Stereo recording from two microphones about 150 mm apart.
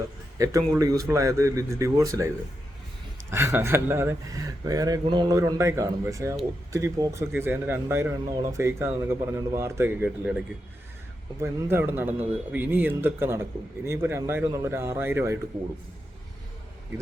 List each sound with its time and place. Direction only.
0.3 s speech: 20° right (ahead or behind)
5.4 s a man's voice: 20° right (ahead or behind)
11.3 s a man's voice: 15° right (ahead or behind)